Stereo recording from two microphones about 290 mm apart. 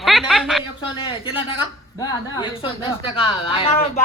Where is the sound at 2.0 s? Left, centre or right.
Centre.